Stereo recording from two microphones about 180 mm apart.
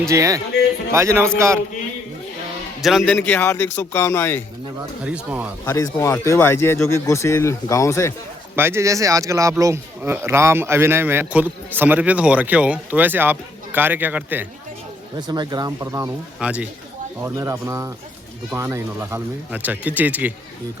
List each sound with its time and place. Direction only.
0.1 s speech: 15° right (ahead or behind)
2.8 s a man's voice: centre (ahead or behind)
5.0 s speech: 5° right (ahead or behind)
5.6 s speech: 15° left (ahead or behind)
8.5 s speech: 15° right (ahead or behind)
15.3 s speech: 20° right (ahead or behind)
16.4 s speech: 5° right (ahead or behind)